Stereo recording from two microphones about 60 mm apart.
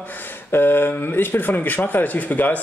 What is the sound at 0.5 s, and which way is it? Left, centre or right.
Speech, left.